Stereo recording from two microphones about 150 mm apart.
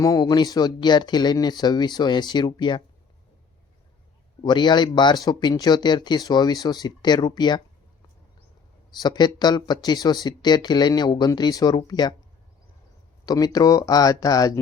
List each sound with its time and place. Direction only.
0.0 s speech: 25° left (ahead or behind)
4.4 s speech: 30° left (ahead or behind)
8.9 s speech: 30° left (ahead or behind)
13.2 s speech: 25° left (ahead or behind)